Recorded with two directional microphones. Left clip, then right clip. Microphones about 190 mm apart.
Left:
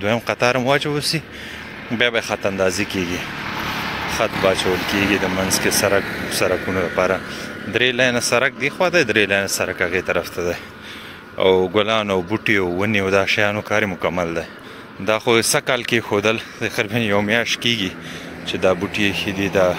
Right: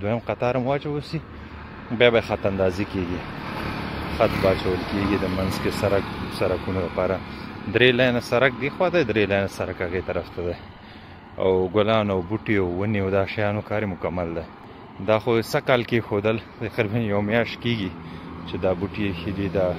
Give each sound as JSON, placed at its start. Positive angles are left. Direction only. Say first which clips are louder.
{"t": 0.0, "sound": "speech", "louder": "left 6 dB", "side_deg": 0}
{"t": 3.4, "sound": "vehicle", "louder": "left 6 dB", "side_deg": -45}
{"t": 4.9, "sound": "speech", "louder": "left 6 dB", "side_deg": -5}
{"t": 7.7, "sound": "speech", "louder": "left 1 dB", "side_deg": -15}